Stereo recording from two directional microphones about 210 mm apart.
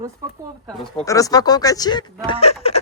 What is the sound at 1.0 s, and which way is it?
Speech, 15° left (ahead or behind).